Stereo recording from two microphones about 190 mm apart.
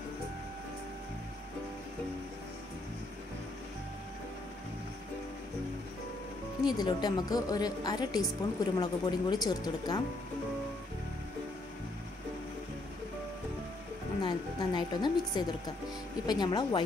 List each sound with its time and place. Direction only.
6.6 s a woman's voice: 20° left (ahead or behind)
14.2 s a woman's voice: 25° left (ahead or behind)